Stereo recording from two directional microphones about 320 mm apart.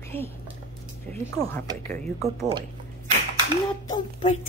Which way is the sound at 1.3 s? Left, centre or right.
Centre.